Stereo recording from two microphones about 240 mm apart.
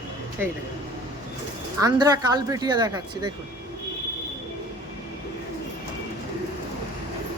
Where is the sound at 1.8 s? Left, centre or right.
Centre.